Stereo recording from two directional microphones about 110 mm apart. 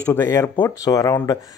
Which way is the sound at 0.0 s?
20° left (ahead or behind).